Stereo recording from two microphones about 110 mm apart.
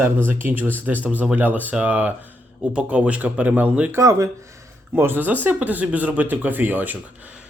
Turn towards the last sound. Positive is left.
turn(degrees=-15)  # may be behind; listen again after turning